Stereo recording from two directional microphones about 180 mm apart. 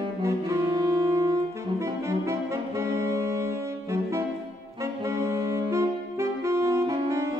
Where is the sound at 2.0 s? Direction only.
15° right (ahead or behind).